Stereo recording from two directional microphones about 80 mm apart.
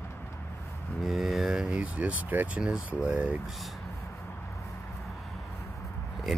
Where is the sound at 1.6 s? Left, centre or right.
Centre.